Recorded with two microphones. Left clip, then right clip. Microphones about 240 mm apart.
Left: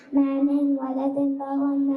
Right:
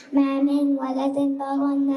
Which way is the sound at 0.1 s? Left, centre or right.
Centre.